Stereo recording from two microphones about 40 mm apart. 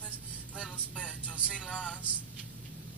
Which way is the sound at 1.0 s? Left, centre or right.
Left.